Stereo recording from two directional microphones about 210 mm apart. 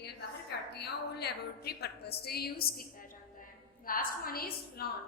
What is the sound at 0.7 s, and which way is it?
A woman's voice, 50° left (ahead or behind).